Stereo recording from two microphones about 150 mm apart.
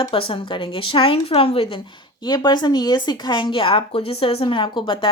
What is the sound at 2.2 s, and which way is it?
A woman's voice, 30° left (ahead or behind).